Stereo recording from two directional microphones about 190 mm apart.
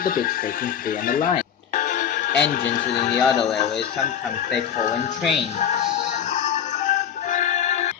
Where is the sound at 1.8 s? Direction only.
45° left (ahead or behind).